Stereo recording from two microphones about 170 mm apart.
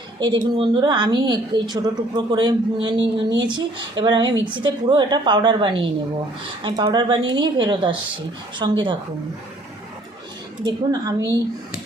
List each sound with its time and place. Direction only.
0.5 s a woman's voice: 30° right (ahead or behind)
3.0 s speech: 90° right
3.4 s a woman's voice: 25° right (ahead or behind)
10.6 s a woman's voice: 20° right (ahead or behind)